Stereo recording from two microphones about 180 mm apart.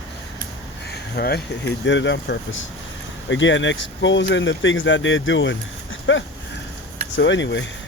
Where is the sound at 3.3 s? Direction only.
90° left.